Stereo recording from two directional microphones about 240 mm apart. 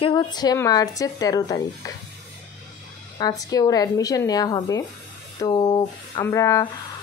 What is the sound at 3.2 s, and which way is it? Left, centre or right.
Speech, centre.